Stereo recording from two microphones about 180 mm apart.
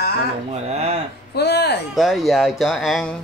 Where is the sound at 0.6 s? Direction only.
35° right (ahead or behind).